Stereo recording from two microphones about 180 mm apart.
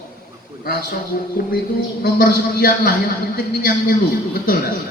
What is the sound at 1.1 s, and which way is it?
Music, 55° left (ahead or behind).